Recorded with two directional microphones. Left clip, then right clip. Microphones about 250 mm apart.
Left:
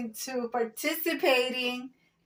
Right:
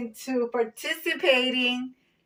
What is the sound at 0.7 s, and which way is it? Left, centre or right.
Speech, left.